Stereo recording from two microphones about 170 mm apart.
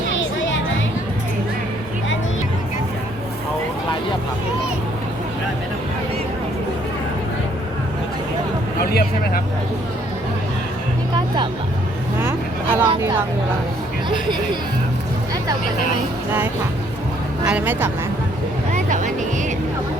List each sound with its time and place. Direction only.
8.9 s a sound: 65° left (ahead or behind)
12.2 s vehicle: 15° right (ahead or behind)
17.4 s speech: 10° right (ahead or behind)
18.7 s music: 45° right (ahead or behind)